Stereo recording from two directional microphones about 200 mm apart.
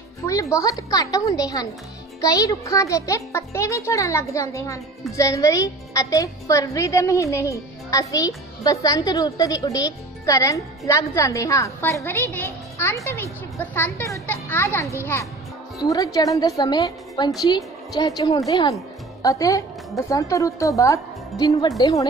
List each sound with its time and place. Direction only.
0.3 s a woman's voice: 15° left (ahead or behind)